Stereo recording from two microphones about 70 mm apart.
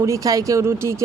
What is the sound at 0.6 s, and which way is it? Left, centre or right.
Speech, right.